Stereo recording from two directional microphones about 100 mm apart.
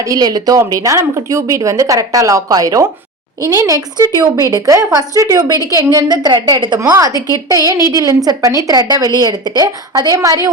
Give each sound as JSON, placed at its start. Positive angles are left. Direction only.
{"t": 0.0, "sound": "a woman's voice", "side_deg": -40}
{"t": 6.7, "sound": "a woman's voice", "side_deg": -35}